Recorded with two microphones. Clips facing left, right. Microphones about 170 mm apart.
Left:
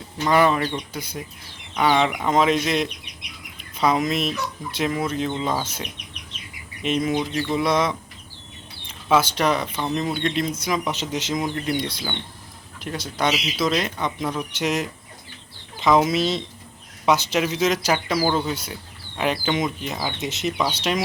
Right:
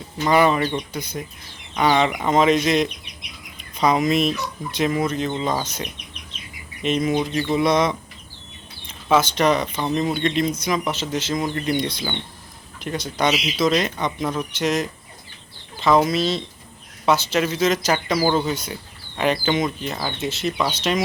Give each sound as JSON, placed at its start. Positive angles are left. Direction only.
{"t": 0.3, "sound": "speech", "side_deg": 0}
{"t": 9.0, "sound": "speech", "side_deg": 10}
{"t": 10.6, "sound": "speech", "side_deg": 10}
{"t": 18.2, "sound": "speech", "side_deg": -5}
{"t": 20.1, "sound": "speech", "side_deg": 15}